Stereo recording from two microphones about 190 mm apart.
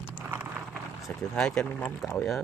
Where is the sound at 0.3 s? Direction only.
10° right (ahead or behind).